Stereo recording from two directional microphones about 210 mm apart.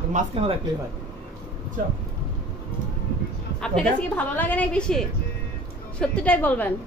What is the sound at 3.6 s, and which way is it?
A woman's voice, 5° left (ahead or behind).